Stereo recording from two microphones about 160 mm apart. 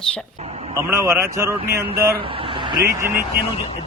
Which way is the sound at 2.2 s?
35° right (ahead or behind).